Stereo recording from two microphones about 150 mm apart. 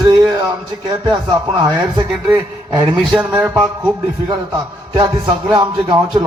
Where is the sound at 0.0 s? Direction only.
30° right (ahead or behind).